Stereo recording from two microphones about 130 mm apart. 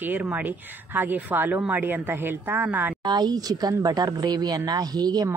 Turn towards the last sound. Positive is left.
turn(degrees=-30)  # may be behind; listen again after turning